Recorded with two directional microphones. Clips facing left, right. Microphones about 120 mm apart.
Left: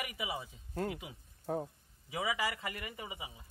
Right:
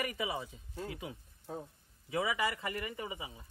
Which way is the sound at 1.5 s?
60° left (ahead or behind).